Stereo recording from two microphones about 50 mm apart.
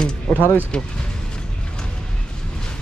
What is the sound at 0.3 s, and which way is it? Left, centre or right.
Speech, left.